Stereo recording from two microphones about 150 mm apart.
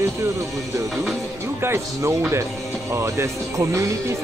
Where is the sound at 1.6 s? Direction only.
15° right (ahead or behind).